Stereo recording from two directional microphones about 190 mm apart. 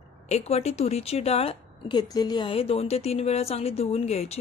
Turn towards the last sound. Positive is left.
turn(degrees=35)  # may be behind; listen again after turning